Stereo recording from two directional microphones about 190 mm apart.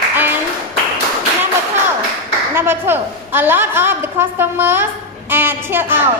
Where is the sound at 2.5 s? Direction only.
10° right (ahead or behind).